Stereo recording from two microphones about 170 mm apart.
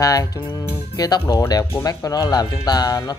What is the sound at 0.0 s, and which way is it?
Speech, 20° left (ahead or behind).